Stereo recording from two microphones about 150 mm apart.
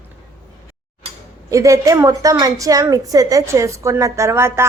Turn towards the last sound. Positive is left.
turn(degrees=-15)  # may be behind; listen again after turning